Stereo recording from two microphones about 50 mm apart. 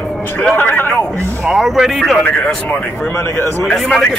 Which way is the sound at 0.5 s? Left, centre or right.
Left.